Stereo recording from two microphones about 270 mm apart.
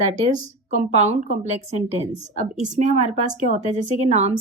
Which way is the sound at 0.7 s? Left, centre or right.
Right.